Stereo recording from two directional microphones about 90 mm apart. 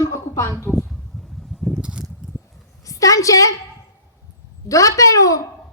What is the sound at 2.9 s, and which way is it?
Speech, 40° left (ahead or behind).